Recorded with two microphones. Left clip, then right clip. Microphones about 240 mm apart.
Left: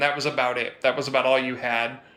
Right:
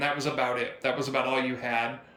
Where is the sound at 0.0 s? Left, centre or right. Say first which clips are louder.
Left 5 dB; centre.